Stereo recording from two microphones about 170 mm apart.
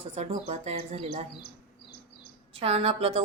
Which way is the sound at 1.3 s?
75° left (ahead or behind).